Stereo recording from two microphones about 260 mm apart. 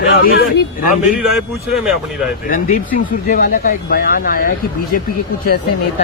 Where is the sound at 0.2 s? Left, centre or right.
Left.